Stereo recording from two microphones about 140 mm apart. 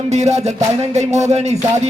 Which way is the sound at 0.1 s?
55° right (ahead or behind).